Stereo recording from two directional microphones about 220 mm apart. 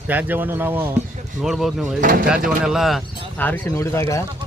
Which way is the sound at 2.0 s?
40° right (ahead or behind).